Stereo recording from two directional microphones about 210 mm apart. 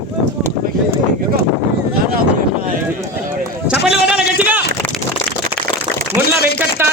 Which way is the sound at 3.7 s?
50° left (ahead or behind).